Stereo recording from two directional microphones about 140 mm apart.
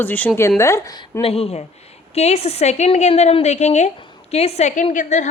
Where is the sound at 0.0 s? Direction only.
10° left (ahead or behind).